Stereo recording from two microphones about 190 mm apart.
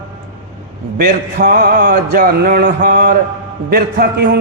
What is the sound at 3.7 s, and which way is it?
Speech, 55° right (ahead or behind).